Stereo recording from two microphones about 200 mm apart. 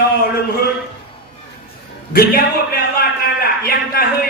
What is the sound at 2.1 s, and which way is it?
Speech, 50° left (ahead or behind).